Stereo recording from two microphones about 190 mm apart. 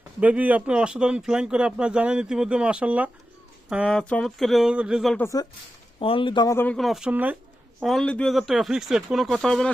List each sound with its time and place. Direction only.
0.2 s speech: 5° right (ahead or behind)
5.1 s speech: 15° left (ahead or behind)
6.0 s speech: 30° left (ahead or behind)
6.7 s speech: centre (ahead or behind)